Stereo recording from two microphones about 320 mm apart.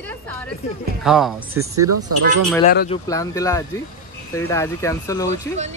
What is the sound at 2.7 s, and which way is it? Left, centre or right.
Speech, left.